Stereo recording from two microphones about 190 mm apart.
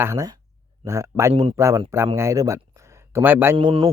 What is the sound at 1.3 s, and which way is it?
Speech, 30° right (ahead or behind).